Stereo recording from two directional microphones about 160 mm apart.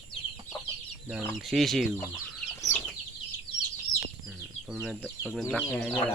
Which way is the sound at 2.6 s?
20° left (ahead or behind).